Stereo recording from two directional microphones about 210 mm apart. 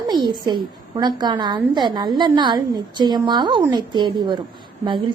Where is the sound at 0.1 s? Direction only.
20° right (ahead or behind).